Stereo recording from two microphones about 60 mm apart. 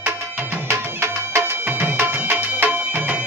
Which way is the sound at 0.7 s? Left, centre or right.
Right.